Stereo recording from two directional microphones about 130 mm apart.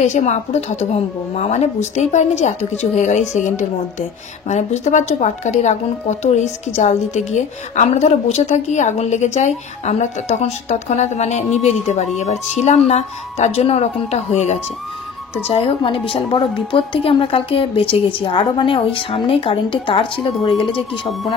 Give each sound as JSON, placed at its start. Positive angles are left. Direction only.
{"t": 0.0, "sound": "a woman's voice", "side_deg": 65}
{"t": 15.4, "sound": "speech", "side_deg": 50}